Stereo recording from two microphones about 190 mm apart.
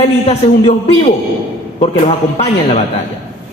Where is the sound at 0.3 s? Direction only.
30° left (ahead or behind).